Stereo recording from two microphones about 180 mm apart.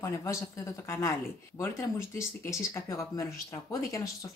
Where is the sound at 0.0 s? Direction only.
15° left (ahead or behind).